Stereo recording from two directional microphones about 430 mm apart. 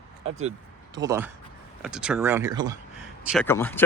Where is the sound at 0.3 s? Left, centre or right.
Centre.